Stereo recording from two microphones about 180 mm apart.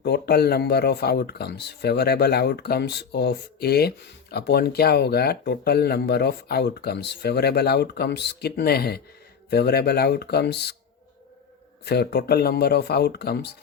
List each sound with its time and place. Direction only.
0.0 s speech: 65° left (ahead or behind)
11.9 s speech: 65° left (ahead or behind)